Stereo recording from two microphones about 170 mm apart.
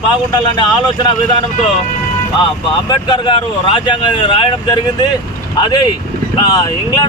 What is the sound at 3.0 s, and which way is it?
Speech, 25° left (ahead or behind).